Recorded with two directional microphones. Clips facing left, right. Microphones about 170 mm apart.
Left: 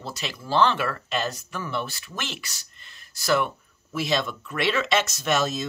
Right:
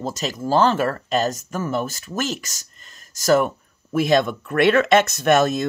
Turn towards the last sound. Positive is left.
turn(degrees=-55)  # may be behind; listen again after turning